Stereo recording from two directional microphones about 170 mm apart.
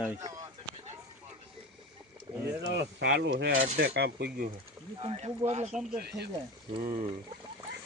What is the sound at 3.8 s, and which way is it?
Cutlery, 75° right (ahead or behind).